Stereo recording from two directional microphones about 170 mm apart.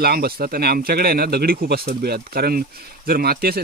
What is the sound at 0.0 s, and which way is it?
Speech, 65° right (ahead or behind).